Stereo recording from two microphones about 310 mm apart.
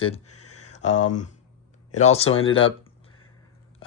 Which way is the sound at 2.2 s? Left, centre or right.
Left.